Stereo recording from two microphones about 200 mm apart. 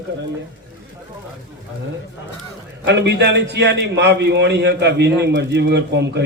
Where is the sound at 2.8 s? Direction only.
60° right (ahead or behind).